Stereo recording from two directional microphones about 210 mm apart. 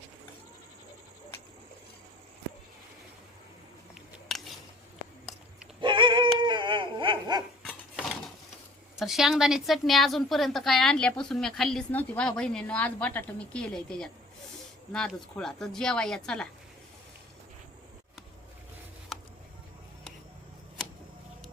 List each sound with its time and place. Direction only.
4.3 s a sound: centre (ahead or behind)
5.8 s dog: 20° right (ahead or behind)
7.6 s dog: centre (ahead or behind)
9.0 s a woman's voice: centre (ahead or behind)